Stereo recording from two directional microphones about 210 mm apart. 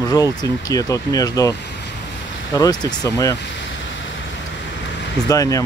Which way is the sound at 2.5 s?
15° left (ahead or behind).